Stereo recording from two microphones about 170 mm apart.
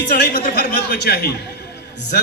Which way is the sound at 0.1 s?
55° left (ahead or behind).